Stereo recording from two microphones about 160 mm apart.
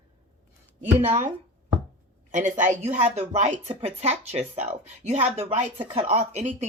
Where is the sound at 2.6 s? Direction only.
50° right (ahead or behind).